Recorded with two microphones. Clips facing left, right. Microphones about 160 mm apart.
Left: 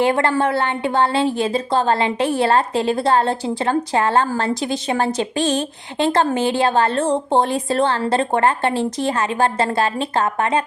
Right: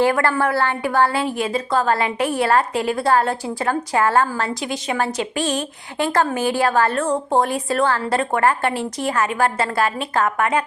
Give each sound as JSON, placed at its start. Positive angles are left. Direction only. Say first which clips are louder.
{"t": 0.0, "sound": "a woman's voice", "louder": "left 1 dB", "side_deg": 25}